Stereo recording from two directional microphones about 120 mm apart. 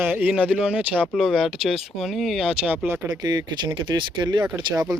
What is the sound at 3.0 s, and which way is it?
Speech, 30° right (ahead or behind).